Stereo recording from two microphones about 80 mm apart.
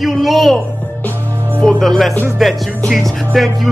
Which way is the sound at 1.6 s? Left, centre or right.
Centre.